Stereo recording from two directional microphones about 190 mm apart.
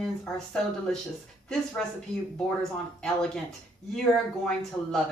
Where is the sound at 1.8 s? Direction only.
5° left (ahead or behind).